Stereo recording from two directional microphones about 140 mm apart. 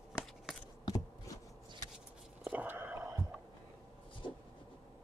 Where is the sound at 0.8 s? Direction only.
25° left (ahead or behind).